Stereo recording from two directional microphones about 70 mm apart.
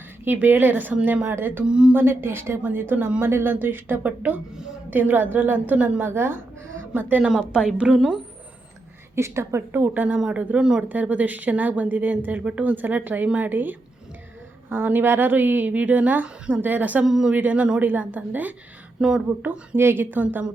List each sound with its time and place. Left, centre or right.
0.3 s a woman's voice: right
5.7 s speech: centre
6.0 s a woman's voice: right
7.2 s speech: centre
9.1 s a woman's voice: right
9.8 s speech: right
10.8 s speech: right
17.1 s speech: centre
17.3 s speech: right
18.9 s speech: centre
19.4 s speech: right